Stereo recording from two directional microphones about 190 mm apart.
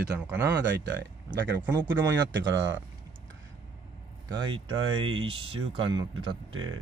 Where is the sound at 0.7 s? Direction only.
65° right (ahead or behind).